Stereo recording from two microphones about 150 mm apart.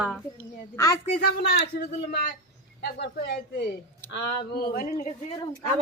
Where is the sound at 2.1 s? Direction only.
85° left.